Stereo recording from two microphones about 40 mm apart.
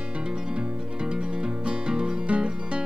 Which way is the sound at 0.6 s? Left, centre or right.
Right.